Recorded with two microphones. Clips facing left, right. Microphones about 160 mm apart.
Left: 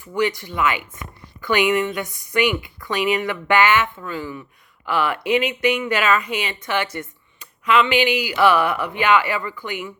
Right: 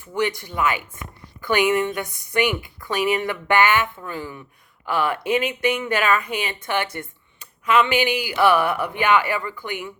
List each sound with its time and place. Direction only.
0.3 s a woman's voice: 50° right (ahead or behind)